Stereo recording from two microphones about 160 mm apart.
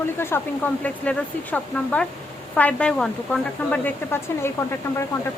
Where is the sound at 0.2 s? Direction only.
15° left (ahead or behind).